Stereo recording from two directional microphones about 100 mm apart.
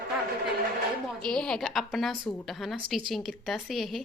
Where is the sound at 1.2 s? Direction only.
10° left (ahead or behind).